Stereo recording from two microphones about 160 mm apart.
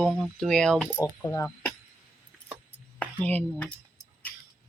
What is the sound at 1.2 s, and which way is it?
Speech, 20° left (ahead or behind).